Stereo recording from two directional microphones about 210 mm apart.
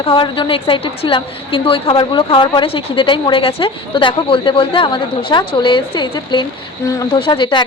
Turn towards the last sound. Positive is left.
turn(degrees=20)  # may be behind; listen again after turning